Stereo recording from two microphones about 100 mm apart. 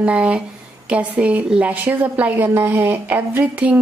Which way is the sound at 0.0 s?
10° right (ahead or behind).